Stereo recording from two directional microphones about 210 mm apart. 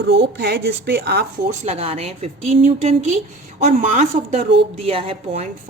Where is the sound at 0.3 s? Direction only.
50° right (ahead or behind).